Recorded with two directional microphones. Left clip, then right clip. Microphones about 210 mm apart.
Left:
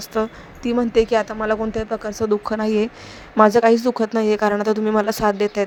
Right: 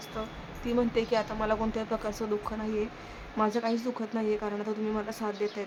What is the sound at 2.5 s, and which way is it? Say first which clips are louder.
A woman's voice: left 13 dB; 40° left (ahead or behind).